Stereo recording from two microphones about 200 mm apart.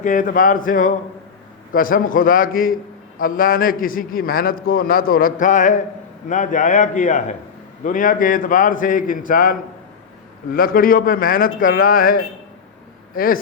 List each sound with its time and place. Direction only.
0.0 s a man's voice: 40° left (ahead or behind)